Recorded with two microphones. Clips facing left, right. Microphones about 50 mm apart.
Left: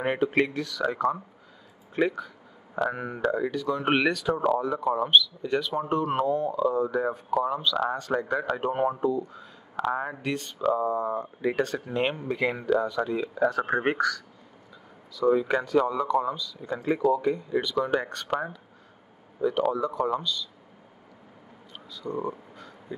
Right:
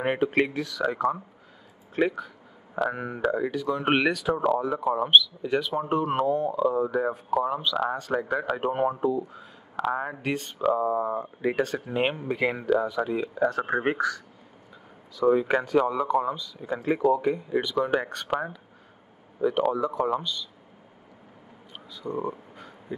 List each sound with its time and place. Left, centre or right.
0.0 s speech: centre
10.2 s speech: centre
10.8 s speech: centre
19.4 s speech: centre
21.7 s a sound: centre